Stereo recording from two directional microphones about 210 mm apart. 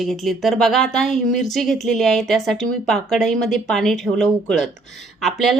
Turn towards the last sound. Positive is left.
turn(degrees=0)  # may be behind; listen again after turning